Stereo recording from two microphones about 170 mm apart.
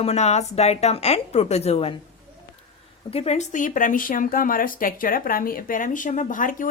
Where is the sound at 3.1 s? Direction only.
35° left (ahead or behind).